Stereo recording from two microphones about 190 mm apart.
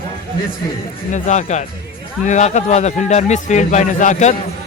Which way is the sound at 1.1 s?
40° left (ahead or behind).